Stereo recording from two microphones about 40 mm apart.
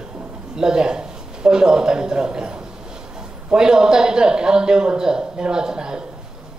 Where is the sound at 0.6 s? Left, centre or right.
Centre.